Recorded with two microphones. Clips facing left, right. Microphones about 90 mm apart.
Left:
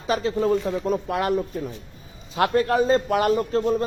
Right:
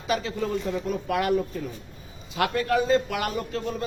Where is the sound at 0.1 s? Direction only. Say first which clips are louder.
Left 5 dB; 35° left (ahead or behind).